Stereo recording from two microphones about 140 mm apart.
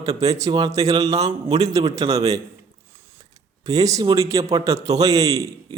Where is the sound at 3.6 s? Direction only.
25° right (ahead or behind).